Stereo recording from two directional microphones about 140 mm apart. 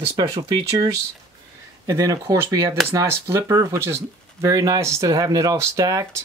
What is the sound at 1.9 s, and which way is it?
Speech, 25° right (ahead or behind).